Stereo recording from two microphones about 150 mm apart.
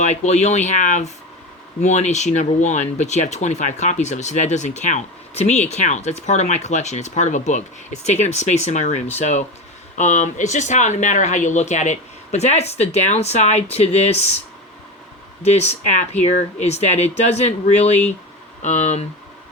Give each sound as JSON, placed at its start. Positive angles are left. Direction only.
{"t": 0.0, "sound": "speech", "side_deg": 50}
{"t": 15.4, "sound": "speech", "side_deg": 45}